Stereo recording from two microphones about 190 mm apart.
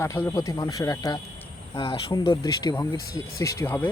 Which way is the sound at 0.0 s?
15° left (ahead or behind).